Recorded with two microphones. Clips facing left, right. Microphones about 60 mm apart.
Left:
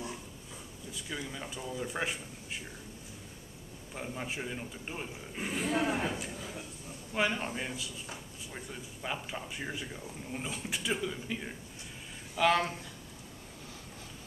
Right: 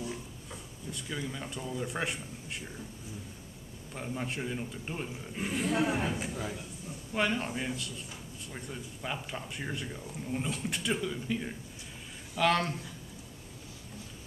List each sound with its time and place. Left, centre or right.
0.9 s speech: centre
3.9 s speech: centre
6.2 s a man's voice: centre
7.2 s speech: centre